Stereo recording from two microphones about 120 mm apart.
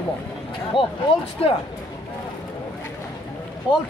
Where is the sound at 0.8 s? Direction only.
45° left (ahead or behind).